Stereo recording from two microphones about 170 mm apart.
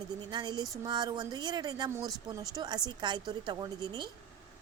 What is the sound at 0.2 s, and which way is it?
A woman's voice, 25° right (ahead or behind).